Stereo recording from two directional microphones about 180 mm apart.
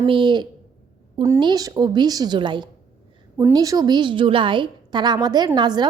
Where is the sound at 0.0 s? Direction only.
30° right (ahead or behind).